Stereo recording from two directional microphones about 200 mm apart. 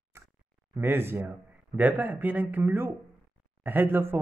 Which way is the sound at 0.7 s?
10° right (ahead or behind).